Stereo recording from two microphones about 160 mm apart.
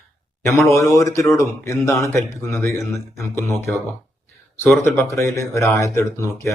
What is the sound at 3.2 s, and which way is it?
Speech, 15° left (ahead or behind).